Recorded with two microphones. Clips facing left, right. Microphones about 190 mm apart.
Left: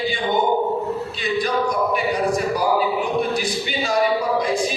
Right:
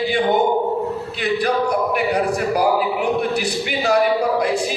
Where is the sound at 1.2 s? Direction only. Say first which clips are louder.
Right 3 dB; 65° right (ahead or behind).